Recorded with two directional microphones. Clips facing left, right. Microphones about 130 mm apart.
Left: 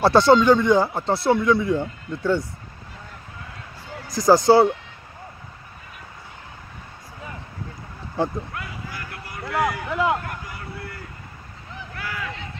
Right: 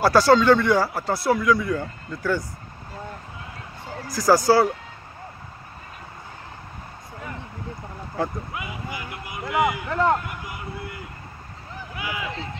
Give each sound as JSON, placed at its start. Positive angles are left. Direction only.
{"t": 0.0, "sound": "speech", "side_deg": 25}
{"t": 4.1, "sound": "speech", "side_deg": 20}
{"t": 8.2, "sound": "speech", "side_deg": 25}
{"t": 8.5, "sound": "a sound", "side_deg": -5}
{"t": 11.9, "sound": "run", "side_deg": -10}